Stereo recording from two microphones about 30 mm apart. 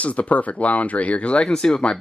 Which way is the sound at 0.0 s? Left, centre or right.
Left.